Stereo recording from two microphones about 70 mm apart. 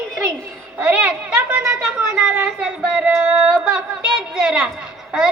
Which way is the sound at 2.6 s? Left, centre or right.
Centre.